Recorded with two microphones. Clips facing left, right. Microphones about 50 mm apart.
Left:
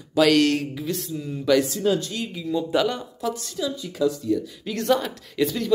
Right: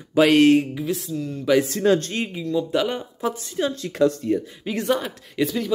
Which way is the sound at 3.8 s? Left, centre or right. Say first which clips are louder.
Right 4 dB; right.